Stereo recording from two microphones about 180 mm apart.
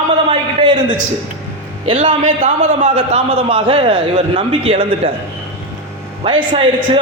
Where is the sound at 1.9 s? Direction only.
30° right (ahead or behind).